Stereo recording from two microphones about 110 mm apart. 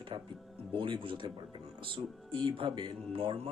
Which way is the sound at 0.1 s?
45° right (ahead or behind).